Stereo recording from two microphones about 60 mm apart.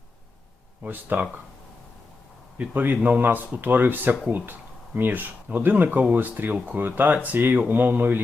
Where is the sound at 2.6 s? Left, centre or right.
Right.